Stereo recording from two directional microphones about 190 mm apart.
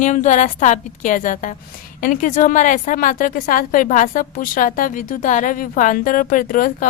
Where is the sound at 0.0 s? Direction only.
40° left (ahead or behind).